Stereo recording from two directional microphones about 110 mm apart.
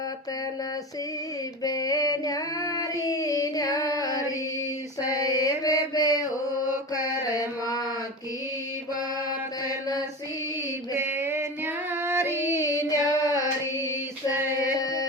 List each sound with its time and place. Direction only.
1.6 s child singing: 35° left (ahead or behind)
5.4 s mantra: 35° left (ahead or behind)
10.9 s child singing: 20° right (ahead or behind)
12.6 s carnatic music: 30° left (ahead or behind)
14.8 s a sound: 35° left (ahead or behind)